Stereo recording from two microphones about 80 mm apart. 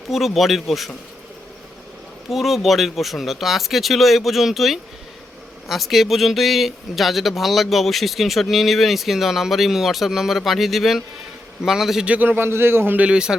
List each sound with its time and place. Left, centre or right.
0.1 s speech: centre
2.3 s speech: centre
12.0 s speech: centre
13.1 s a man's voice: centre